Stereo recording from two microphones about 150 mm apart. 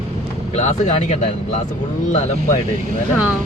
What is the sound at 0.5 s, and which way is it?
Speech, 50° left (ahead or behind).